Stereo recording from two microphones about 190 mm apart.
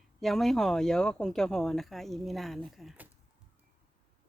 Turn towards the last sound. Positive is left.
turn(degrees=0)  # may be behind; listen again after turning